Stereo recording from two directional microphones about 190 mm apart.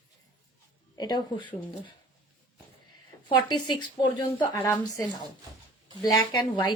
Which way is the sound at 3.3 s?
25° left (ahead or behind).